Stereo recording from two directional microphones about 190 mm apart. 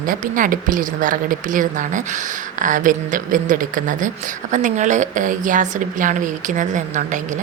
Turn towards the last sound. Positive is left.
turn(degrees=-40)  # may be behind; listen again after turning